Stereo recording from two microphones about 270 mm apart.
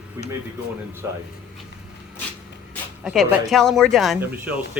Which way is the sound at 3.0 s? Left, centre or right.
Centre.